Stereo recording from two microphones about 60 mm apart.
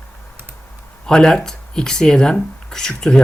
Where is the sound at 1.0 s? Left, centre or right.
Centre.